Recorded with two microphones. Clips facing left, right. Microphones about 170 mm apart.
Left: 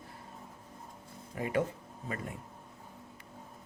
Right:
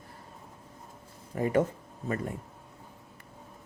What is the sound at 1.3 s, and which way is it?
Speech, 40° right (ahead or behind).